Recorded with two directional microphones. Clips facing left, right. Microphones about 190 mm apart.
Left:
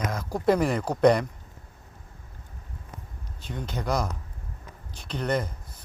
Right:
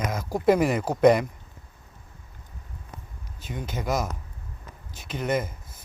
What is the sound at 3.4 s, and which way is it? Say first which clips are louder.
Speech: even; 5° right (ahead or behind).